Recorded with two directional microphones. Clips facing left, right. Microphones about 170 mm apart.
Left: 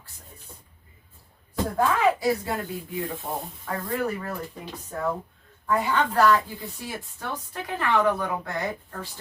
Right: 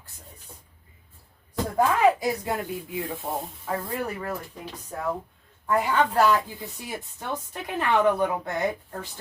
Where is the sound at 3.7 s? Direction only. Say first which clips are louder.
Left 2 dB; 15° right (ahead or behind).